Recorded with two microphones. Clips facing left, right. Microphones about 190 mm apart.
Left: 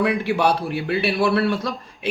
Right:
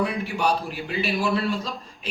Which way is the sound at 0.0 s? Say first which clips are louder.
Left 5 dB; 80° left.